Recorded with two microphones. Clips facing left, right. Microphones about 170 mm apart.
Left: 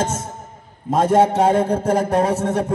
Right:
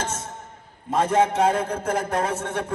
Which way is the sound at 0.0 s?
40° left (ahead or behind).